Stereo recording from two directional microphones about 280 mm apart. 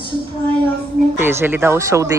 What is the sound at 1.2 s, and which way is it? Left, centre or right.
Speech, centre.